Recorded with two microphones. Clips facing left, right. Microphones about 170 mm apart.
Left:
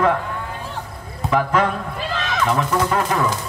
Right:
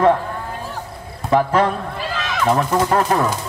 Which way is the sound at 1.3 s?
35° right (ahead or behind).